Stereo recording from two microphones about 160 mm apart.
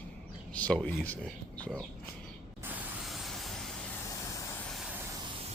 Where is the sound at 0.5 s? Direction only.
5° left (ahead or behind).